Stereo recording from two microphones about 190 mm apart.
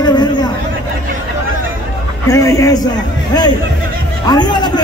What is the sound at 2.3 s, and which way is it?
Speech, 15° left (ahead or behind).